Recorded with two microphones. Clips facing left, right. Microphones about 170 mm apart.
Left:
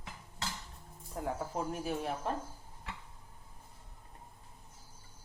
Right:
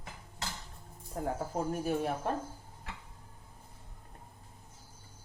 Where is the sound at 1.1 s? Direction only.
40° right (ahead or behind).